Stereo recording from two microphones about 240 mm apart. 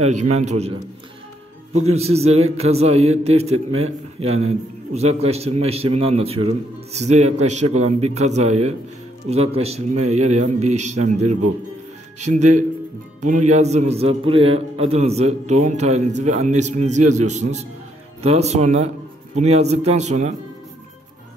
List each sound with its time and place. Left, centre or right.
0.0 s a man's voice: right
2.0 s a man's voice: right